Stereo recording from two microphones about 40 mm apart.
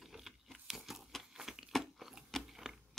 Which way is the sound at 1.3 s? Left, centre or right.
Centre.